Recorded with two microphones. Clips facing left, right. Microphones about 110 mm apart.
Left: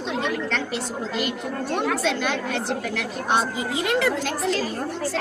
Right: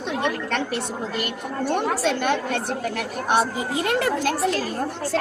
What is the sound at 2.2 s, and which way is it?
Speech, 50° right (ahead or behind).